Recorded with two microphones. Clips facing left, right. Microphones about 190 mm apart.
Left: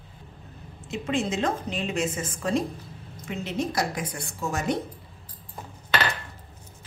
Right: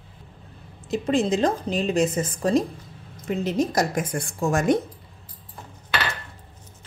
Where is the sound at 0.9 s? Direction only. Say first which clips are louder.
Right 6 dB; 35° right (ahead or behind).